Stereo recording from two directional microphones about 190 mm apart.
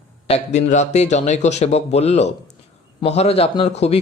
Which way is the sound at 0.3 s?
35° left (ahead or behind).